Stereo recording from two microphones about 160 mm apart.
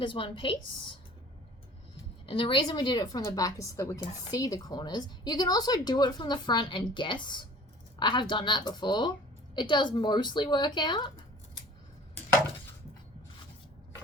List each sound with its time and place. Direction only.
0.0 s a woman's voice: 30° left (ahead or behind)
2.2 s a woman's voice: 30° left (ahead or behind)